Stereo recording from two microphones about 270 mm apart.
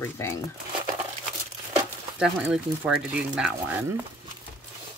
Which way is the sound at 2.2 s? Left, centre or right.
Centre.